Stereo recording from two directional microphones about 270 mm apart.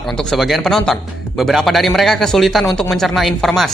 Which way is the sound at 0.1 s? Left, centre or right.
Centre.